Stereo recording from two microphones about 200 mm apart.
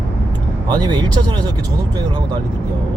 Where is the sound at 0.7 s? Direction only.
20° right (ahead or behind).